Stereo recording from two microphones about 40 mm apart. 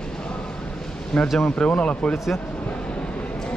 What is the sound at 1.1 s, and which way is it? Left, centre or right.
Speech, centre.